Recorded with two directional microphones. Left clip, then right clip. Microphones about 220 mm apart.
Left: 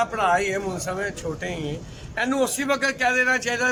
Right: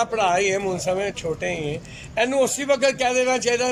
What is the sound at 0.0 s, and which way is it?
Speech, 10° right (ahead or behind).